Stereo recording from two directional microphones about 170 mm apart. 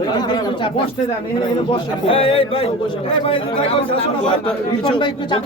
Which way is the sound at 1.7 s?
30° left (ahead or behind).